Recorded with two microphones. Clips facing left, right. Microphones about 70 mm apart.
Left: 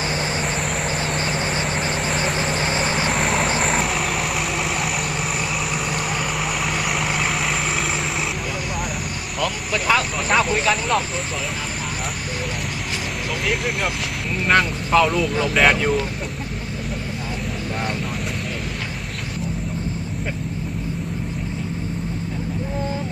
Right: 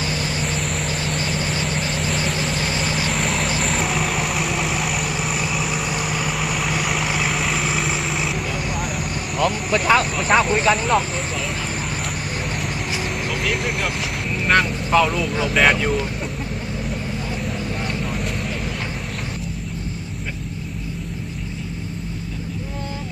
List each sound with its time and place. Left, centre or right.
0.0 s vehicle: left
0.6 s vehicle: centre
0.9 s vehicle: left
3.1 s vehicle: centre
9.4 s vehicle: right
10.7 s speech: right
12.3 s vehicle: right
13.4 s speech: centre